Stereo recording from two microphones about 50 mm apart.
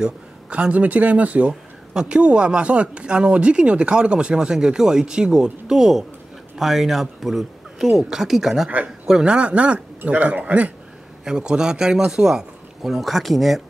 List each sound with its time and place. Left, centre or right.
0.5 s speech: right
1.5 s speech: centre
9.0 s speech: centre
11.2 s speech: centre
12.9 s speech: centre